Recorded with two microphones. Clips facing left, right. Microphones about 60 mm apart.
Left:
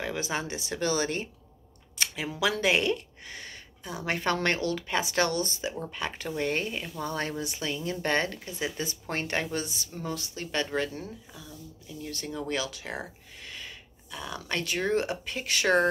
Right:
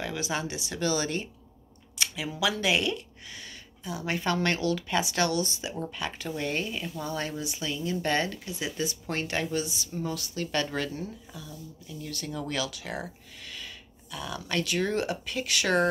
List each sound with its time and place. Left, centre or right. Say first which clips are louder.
0.0 s speech: even; left
2.0 s a sound: even; left
2.5 s speech: left 2 dB; left
10.1 s speech: even; left
12.0 s speech: even; left